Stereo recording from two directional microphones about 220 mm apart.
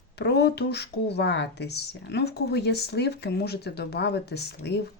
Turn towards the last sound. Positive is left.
turn(degrees=50)  # may be behind; listen again after turning